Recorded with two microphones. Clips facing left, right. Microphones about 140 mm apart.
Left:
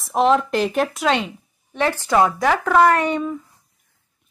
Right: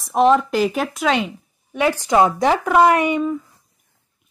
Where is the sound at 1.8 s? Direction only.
10° right (ahead or behind).